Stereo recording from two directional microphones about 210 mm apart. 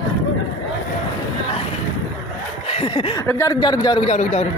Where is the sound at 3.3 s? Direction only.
15° left (ahead or behind).